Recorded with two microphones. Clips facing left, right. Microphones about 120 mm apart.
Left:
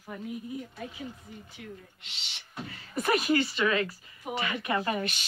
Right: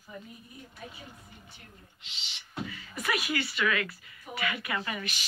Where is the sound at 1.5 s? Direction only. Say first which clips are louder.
Left 10 dB; 75° left (ahead or behind); by 2.4 s 60° left (ahead or behind).